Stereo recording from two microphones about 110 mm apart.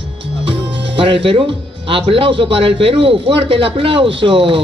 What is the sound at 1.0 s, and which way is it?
A man's voice, 55° right (ahead or behind).